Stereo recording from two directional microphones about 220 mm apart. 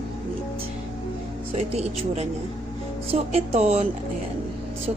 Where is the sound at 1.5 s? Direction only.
30° right (ahead or behind).